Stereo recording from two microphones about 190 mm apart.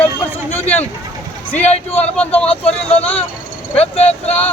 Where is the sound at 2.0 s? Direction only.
5° left (ahead or behind).